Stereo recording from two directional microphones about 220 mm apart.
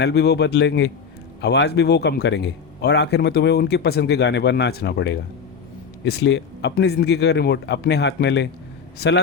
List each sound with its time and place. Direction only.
0.0 s a man's voice: 50° left (ahead or behind)